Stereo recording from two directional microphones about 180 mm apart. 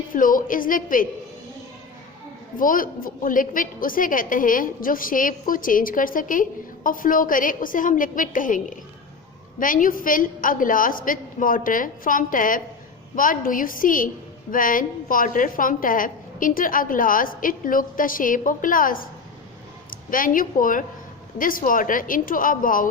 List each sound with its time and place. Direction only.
0.1 s a woman's voice: 50° left (ahead or behind)
2.6 s a woman's voice: 50° left (ahead or behind)